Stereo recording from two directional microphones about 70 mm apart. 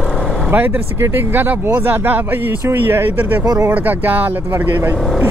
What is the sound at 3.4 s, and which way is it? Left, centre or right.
Speech, right.